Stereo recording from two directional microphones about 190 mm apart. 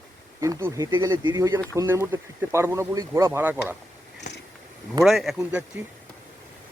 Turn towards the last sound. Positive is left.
turn(degrees=-5)  # may be behind; listen again after turning